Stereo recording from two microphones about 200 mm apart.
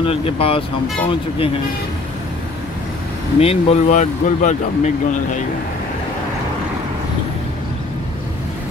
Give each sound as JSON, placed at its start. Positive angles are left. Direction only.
{"t": 0.0, "sound": "speech", "side_deg": 30}
{"t": 3.3, "sound": "speech", "side_deg": 30}